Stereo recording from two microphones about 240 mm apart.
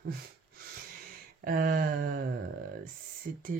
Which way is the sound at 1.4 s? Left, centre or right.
Right.